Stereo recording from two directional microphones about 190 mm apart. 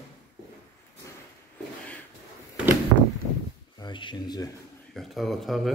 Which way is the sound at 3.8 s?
25° left (ahead or behind).